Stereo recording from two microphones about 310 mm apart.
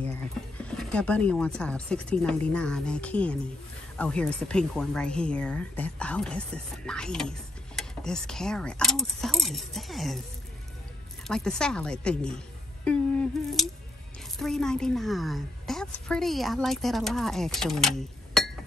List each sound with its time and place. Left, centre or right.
0.6 s speech: centre
11.2 s speech: centre